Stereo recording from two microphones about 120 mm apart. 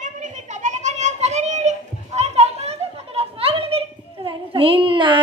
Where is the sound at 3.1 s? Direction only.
50° right (ahead or behind).